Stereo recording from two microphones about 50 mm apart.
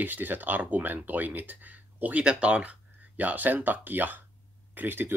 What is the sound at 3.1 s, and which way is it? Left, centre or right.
Speech, right.